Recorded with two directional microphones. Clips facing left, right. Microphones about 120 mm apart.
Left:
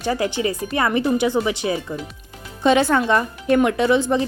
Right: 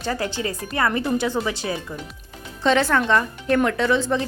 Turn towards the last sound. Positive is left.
turn(degrees=15)  # may be behind; listen again after turning